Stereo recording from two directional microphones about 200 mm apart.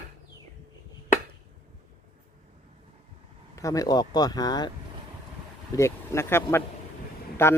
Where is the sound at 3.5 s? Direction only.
15° left (ahead or behind).